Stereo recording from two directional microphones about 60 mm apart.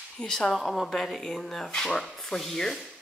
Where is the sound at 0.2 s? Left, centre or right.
Centre.